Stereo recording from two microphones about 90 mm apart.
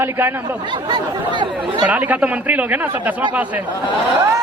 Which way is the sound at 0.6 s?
60° right (ahead or behind).